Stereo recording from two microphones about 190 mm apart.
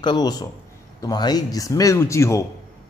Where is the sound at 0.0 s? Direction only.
20° left (ahead or behind).